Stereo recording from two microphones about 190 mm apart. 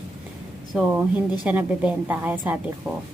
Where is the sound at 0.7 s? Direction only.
5° right (ahead or behind).